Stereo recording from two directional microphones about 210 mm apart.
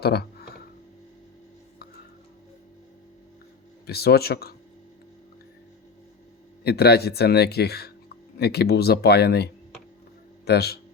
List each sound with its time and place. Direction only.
0.0 s a sound: 50° left (ahead or behind)
3.8 s speech: 50° left (ahead or behind)
6.7 s speech: 50° left (ahead or behind)